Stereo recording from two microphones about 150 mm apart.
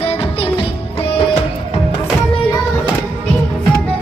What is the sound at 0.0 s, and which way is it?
Music, 40° left (ahead or behind).